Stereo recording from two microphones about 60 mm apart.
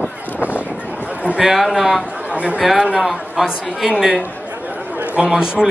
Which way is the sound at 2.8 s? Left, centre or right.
Centre.